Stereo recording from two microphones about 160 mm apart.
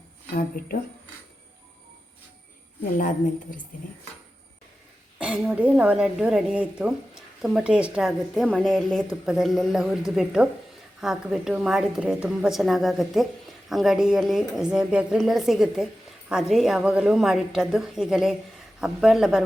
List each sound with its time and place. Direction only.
0.3 s speech: 65° left (ahead or behind)
3.0 s a woman's voice: 55° left (ahead or behind)
5.2 s a woman's voice: 5° right (ahead or behind)